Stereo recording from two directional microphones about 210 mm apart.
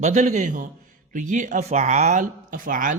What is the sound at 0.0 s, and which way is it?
Speech, 35° right (ahead or behind).